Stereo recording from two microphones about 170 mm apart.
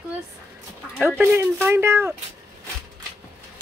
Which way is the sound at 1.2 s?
15° right (ahead or behind).